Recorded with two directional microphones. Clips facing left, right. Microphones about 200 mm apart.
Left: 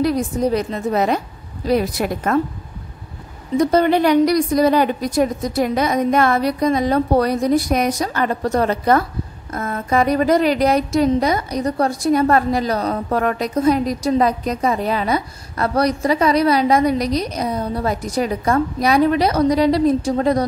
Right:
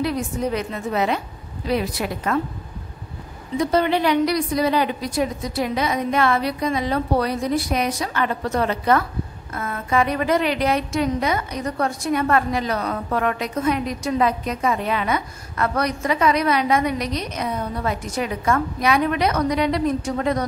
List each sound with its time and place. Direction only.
0.0 s a woman's voice: 40° left (ahead or behind)
3.5 s a woman's voice: 45° left (ahead or behind)